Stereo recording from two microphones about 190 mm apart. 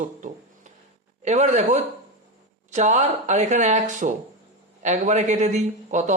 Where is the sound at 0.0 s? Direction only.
40° right (ahead or behind).